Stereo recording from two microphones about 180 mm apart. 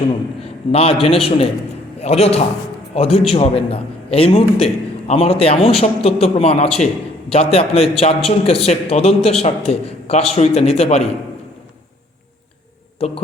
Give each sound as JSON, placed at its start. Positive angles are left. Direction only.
{"t": 0.7, "sound": "a man's voice", "side_deg": 30}
{"t": 13.0, "sound": "a man's voice", "side_deg": 35}